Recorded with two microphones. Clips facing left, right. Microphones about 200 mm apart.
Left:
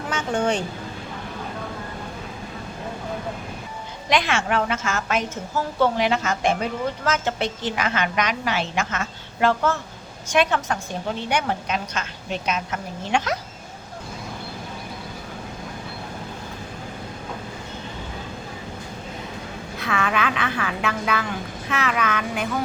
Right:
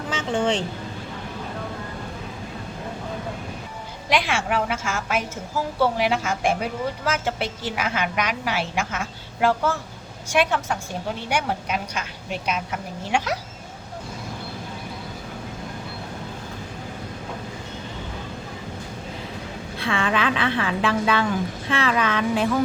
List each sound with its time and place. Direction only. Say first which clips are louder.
0.2 s speech: even; 25° right (ahead or behind)
4.1 s a woman's voice: left 1 dB; 10° right (ahead or behind)
19.7 s a woman's voice: right 1 dB; 30° right (ahead or behind)